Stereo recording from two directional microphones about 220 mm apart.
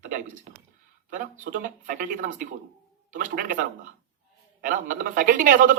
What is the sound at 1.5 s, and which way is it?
Speech, 40° right (ahead or behind).